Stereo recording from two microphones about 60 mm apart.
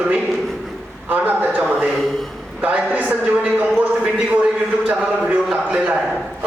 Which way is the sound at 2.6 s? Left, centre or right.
Right.